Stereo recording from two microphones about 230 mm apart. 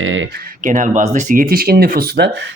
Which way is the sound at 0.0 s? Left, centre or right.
Right.